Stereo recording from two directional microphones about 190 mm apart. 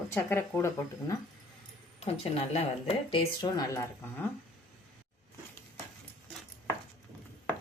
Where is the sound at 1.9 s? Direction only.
35° left (ahead or behind); by 4.3 s 20° left (ahead or behind).